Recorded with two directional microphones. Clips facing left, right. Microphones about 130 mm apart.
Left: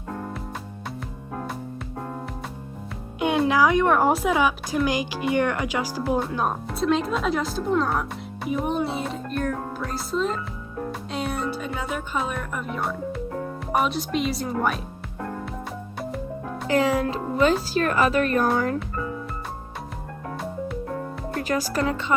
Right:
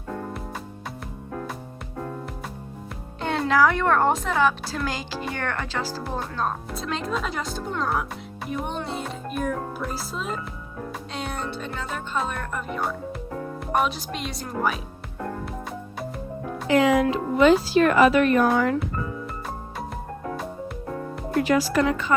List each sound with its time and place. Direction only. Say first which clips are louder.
3.2 s speech: left 1 dB; 15° left (ahead or behind)
6.7 s a child's voice: left 5 dB; centre (ahead or behind)
11.1 s music: left 4 dB; centre (ahead or behind)
13.7 s speech: left 2 dB; centre (ahead or behind)
16.6 s speech: right 3 dB; 35° left (ahead or behind)
21.4 s speech: right 3 dB; 40° left (ahead or behind)